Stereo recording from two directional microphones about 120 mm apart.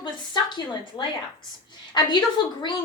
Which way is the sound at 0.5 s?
35° left (ahead or behind).